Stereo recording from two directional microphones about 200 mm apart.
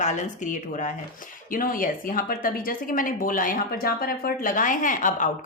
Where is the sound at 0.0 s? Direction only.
35° left (ahead or behind).